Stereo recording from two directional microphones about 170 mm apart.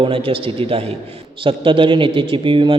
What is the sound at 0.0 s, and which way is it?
A man's voice, 30° right (ahead or behind).